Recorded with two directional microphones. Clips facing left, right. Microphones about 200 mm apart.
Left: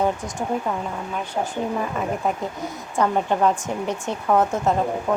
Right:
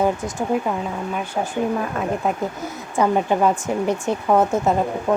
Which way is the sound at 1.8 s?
Centre (ahead or behind).